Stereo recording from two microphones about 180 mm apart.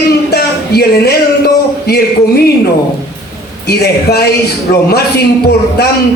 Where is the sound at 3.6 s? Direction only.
65° left (ahead or behind).